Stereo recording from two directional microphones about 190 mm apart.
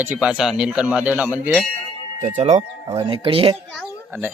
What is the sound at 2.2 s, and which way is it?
Speech, 35° right (ahead or behind).